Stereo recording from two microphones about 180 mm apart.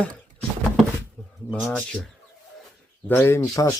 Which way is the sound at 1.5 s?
Centre (ahead or behind).